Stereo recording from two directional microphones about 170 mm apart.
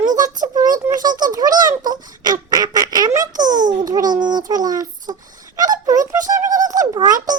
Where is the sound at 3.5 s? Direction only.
50° right (ahead or behind).